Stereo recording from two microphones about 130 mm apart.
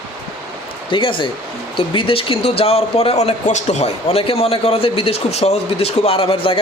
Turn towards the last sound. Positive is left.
turn(degrees=45)  # may be behind; listen again after turning